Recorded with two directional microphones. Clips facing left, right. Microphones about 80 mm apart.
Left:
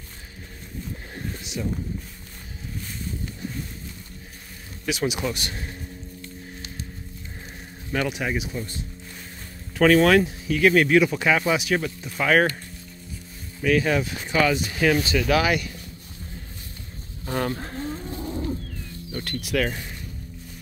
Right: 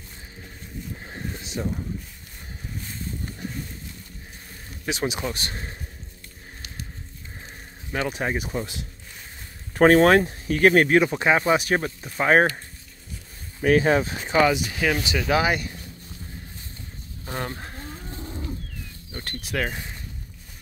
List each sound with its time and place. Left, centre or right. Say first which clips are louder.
1.1 s a sound: right 1 dB; right
4.8 s speech: left 1 dB; right
8.1 s speech: right 1 dB; right
9.8 s speech: right 1 dB; right
13.6 s speech: right 2 dB; right
14.5 s speech: left 2 dB; centre
15.0 s speech: left 1 dB; right
17.3 s speech: left 5 dB; centre
19.1 s speech: left 4 dB; right
19.6 s speech: left 2 dB; centre